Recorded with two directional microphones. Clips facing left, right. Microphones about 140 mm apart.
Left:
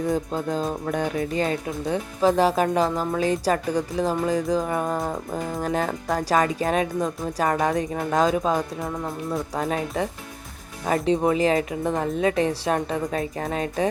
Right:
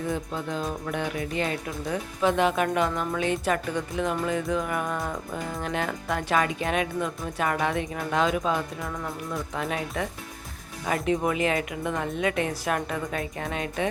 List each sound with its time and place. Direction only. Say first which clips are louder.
0.1 s speech: left 5 dB; 40° left (ahead or behind)
8.8 s speech: left 4 dB; 25° left (ahead or behind)
9.6 s speech: left 4 dB; 35° left (ahead or behind)